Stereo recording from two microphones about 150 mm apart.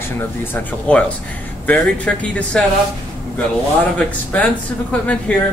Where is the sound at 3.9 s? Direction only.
10° left (ahead or behind).